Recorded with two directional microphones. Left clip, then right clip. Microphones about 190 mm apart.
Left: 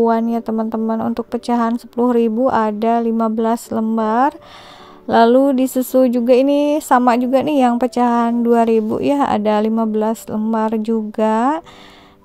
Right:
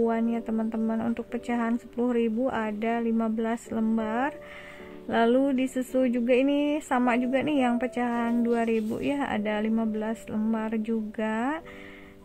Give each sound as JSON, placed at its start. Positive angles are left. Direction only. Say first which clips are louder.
{"t": 0.0, "sound": "a woman's voice", "louder": "left 11 dB", "side_deg": 35}
{"t": 5.4, "sound": "a woman's voice", "louder": "left 11 dB", "side_deg": 40}